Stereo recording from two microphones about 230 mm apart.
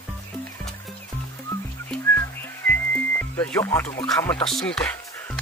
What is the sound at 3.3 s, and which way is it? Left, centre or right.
Music, centre.